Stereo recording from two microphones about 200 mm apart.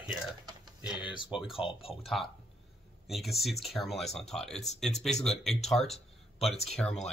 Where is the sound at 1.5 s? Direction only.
30° left (ahead or behind).